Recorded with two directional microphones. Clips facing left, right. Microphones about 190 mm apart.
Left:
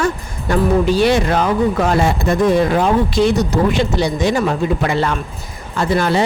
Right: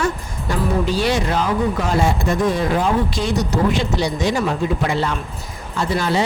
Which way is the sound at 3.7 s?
55° left (ahead or behind).